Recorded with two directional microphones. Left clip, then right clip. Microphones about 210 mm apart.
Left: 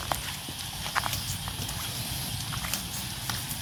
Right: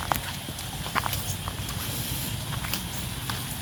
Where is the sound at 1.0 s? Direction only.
5° right (ahead or behind).